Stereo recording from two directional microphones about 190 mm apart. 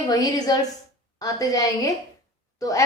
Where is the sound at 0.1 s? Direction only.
20° left (ahead or behind).